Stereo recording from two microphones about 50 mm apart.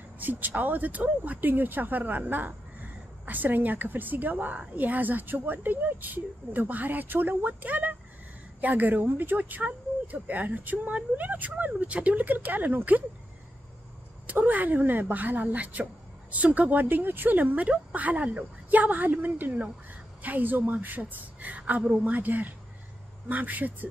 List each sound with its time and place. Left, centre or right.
0.2 s speech: right
14.2 s speech: right
16.8 s speech: right